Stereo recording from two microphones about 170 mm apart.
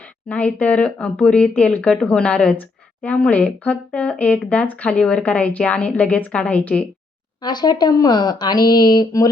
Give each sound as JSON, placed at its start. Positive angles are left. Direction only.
{"t": 0.0, "sound": "speech", "side_deg": 10}
{"t": 7.4, "sound": "speech", "side_deg": 25}